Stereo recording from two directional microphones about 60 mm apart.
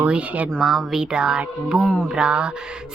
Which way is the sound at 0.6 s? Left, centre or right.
Centre.